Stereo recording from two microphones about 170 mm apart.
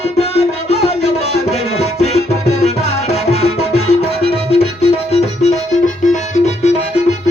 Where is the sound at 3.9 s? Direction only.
35° left (ahead or behind).